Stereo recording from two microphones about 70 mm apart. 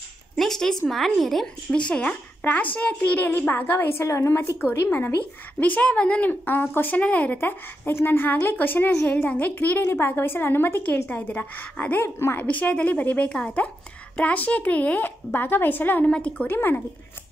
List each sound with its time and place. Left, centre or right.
0.4 s speech: centre
6.4 s speech: left
9.8 s a woman's voice: left
16.1 s a woman's voice: centre
16.4 s a woman's voice: left